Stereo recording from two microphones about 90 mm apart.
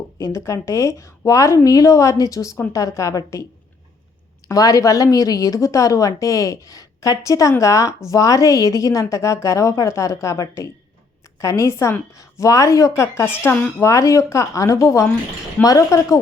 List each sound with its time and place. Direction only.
0.2 s a woman's voice: 35° left (ahead or behind)
4.4 s a woman's voice: 40° left (ahead or behind)